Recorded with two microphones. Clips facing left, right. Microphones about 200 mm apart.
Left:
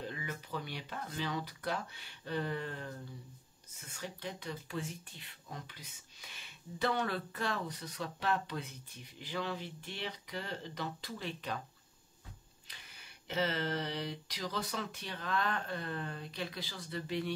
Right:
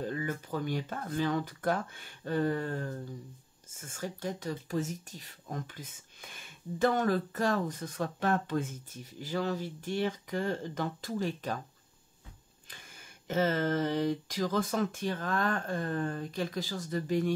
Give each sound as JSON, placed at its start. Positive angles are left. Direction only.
{"t": 0.0, "sound": "speech", "side_deg": -45}
{"t": 13.3, "sound": "speech", "side_deg": -45}